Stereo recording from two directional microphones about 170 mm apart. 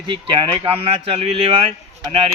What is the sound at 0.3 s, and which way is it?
Speech, 30° right (ahead or behind).